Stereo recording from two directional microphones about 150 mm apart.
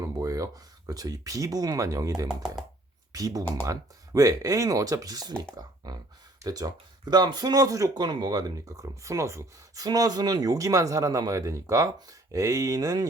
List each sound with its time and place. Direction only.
0.0 s speech: 20° right (ahead or behind)
2.2 s speech: 5° right (ahead or behind)
3.1 s speech: 25° right (ahead or behind)